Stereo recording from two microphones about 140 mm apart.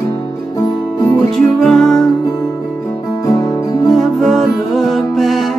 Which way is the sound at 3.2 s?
25° left (ahead or behind).